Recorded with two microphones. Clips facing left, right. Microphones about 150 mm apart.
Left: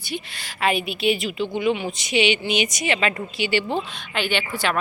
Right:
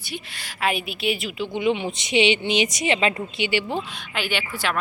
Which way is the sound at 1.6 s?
25° right (ahead or behind).